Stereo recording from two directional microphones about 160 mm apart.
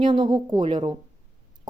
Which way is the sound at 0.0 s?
30° right (ahead or behind).